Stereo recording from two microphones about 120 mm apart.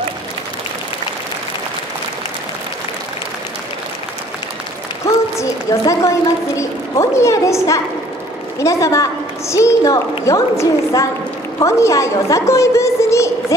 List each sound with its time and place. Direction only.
5.0 s a woman's voice: 25° left (ahead or behind)